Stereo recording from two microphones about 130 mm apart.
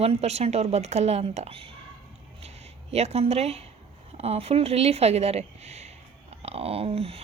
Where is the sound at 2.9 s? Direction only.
55° right (ahead or behind).